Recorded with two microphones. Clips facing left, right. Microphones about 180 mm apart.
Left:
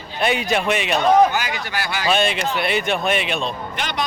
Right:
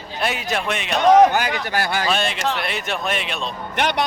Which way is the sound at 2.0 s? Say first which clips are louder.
Left 2 dB; centre (ahead or behind).